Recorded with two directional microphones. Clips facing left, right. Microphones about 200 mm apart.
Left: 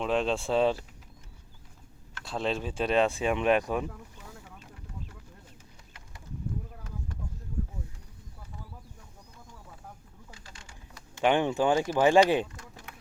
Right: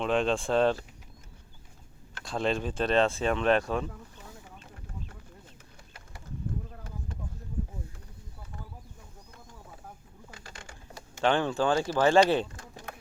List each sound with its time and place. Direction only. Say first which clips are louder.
0.0 s speech: right 1 dB; 5° left (ahead or behind)
2.2 s speech: right 2 dB; 5° left (ahead or behind)
10.3 s bird: right 7 dB; 60° right (ahead or behind)
11.2 s speech: left 1 dB; 15° left (ahead or behind)